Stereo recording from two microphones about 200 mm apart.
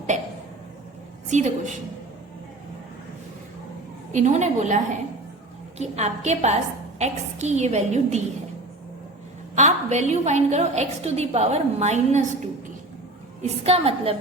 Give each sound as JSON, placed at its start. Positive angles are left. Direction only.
{"t": 0.1, "sound": "a woman's voice", "side_deg": -35}
{"t": 1.3, "sound": "a woman's voice", "side_deg": -35}
{"t": 4.1, "sound": "a woman's voice", "side_deg": -35}
{"t": 9.6, "sound": "a woman's voice", "side_deg": -35}